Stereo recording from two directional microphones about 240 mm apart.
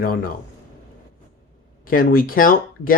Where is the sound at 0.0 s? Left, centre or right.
Left.